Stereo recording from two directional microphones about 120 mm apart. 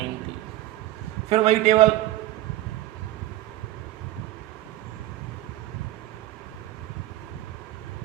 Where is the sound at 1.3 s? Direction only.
70° right (ahead or behind).